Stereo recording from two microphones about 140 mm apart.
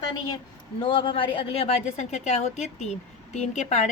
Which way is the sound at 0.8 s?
35° left (ahead or behind).